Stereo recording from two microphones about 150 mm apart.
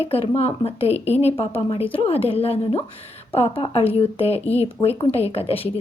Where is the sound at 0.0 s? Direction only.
40° left (ahead or behind).